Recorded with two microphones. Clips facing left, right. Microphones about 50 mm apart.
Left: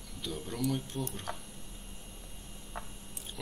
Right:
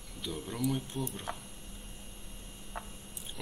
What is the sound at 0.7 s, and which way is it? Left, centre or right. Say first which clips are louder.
Speech: even; centre.